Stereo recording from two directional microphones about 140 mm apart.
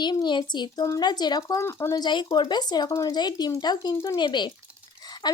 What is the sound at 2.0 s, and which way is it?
A woman's voice, 30° left (ahead or behind).